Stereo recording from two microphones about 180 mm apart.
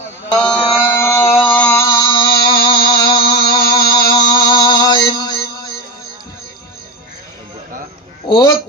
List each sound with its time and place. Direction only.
0.3 s mantra: 5° left (ahead or behind); by 2.2 s 25° left (ahead or behind)
2.6 s music: 25° left (ahead or behind)
8.3 s a sound: 20° left (ahead or behind)